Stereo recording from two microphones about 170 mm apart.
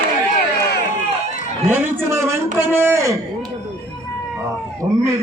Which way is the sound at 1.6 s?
15° right (ahead or behind).